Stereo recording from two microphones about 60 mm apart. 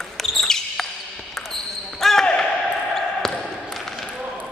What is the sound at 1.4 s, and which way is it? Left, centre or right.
Basketball bounce, centre.